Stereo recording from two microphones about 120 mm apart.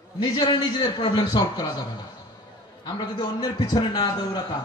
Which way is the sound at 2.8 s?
35° left (ahead or behind).